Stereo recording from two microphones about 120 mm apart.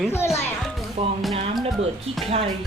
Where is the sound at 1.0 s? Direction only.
60° right (ahead or behind).